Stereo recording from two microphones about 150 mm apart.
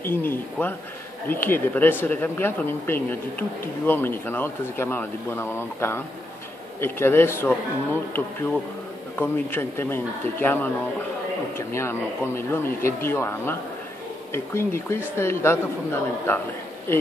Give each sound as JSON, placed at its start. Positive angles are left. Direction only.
{"t": 0.0, "sound": "speech", "side_deg": 15}
{"t": 9.1, "sound": "speech", "side_deg": 15}